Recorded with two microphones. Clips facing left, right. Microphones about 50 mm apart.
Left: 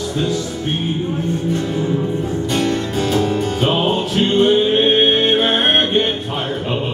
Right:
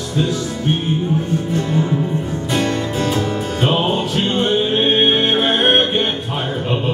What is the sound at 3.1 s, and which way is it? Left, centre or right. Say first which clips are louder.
Music: left 3 dB; centre.